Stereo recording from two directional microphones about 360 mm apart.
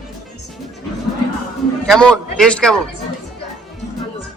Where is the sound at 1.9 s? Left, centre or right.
Centre.